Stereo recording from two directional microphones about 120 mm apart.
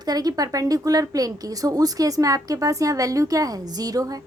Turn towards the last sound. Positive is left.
turn(degrees=-30)  # may be behind; listen again after turning